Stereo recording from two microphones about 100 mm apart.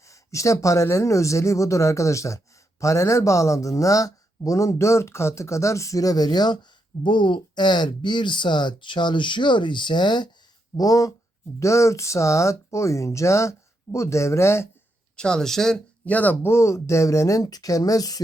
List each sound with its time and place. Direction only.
0.0 s speech: 30° left (ahead or behind); by 10.2 s 50° left (ahead or behind)
10.8 s speech: 35° left (ahead or behind)
15.1 s speech: 10° left (ahead or behind); by 18.2 s 40° left (ahead or behind)